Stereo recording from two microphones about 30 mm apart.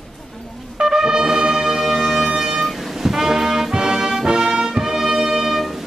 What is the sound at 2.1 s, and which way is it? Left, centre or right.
Music, centre.